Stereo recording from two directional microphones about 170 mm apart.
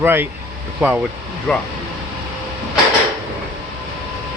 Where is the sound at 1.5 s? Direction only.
5° left (ahead or behind).